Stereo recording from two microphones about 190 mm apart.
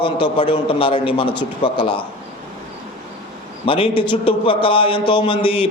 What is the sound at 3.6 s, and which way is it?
A man's voice, 25° left (ahead or behind).